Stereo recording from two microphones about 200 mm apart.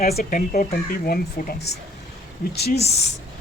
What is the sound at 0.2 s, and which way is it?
Speech, 45° left (ahead or behind).